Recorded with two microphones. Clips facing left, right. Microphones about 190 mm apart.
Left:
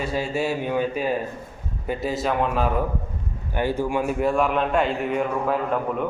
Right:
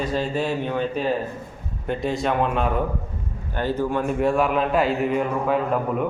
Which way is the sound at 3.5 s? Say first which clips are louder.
Even; 10° left (ahead or behind).